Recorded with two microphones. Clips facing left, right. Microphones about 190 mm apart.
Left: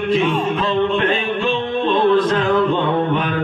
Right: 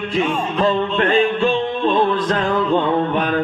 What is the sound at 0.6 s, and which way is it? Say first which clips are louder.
Music: right 4 dB; 45° right (ahead or behind).